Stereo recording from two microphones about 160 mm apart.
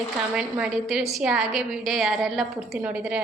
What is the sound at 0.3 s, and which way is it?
A woman's voice, 5° right (ahead or behind).